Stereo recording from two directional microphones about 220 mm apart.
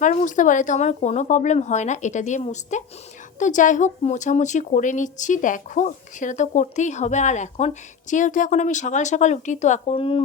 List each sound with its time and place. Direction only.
0.0 s a woman's voice: 35° left (ahead or behind)